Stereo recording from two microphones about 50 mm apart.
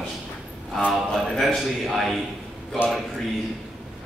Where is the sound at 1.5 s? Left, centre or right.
Centre.